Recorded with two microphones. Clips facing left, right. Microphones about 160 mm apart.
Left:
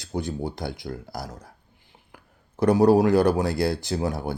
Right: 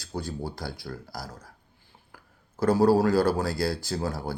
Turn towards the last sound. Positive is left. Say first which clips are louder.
# left 4 dB
turn(degrees=25)  # may be behind; listen again after turning